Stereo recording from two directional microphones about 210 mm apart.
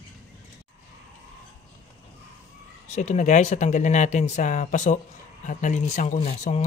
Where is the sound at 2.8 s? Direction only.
35° left (ahead or behind).